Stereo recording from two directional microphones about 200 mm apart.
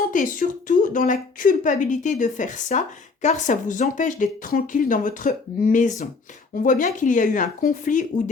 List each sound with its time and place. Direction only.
0.1 s a woman's voice: 40° left (ahead or behind)